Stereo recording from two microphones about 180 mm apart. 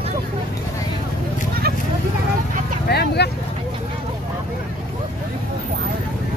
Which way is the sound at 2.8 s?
65° left (ahead or behind).